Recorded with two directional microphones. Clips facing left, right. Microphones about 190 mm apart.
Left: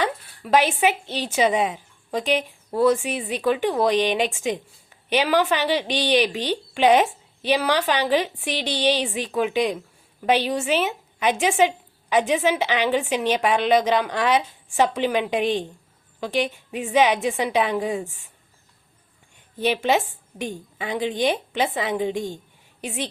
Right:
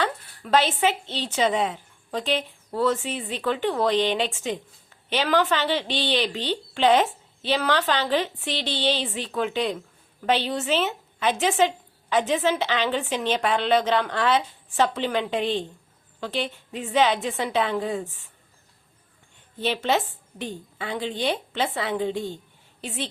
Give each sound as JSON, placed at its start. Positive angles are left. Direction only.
{"t": 0.0, "sound": "speech", "side_deg": 15}
{"t": 19.5, "sound": "speech", "side_deg": 15}